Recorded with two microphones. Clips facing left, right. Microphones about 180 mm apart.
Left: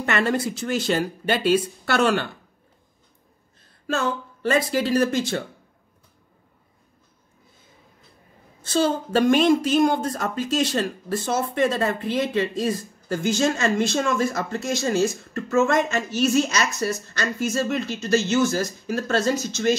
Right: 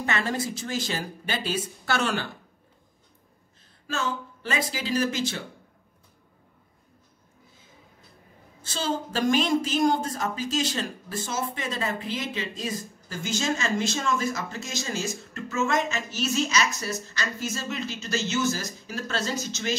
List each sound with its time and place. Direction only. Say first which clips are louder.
0.0 s speech: left 5 dB; 65° left (ahead or behind)
3.9 s speech: left 5 dB; 55° left (ahead or behind)
8.8 s speech: left 5 dB; 60° left (ahead or behind)